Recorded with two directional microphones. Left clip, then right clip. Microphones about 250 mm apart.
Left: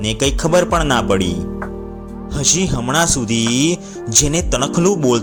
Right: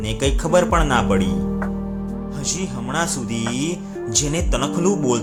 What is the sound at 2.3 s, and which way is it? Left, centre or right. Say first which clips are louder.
Speech: left 11 dB; left.